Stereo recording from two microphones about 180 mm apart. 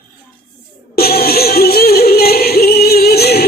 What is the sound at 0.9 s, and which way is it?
Music, 60° left (ahead or behind).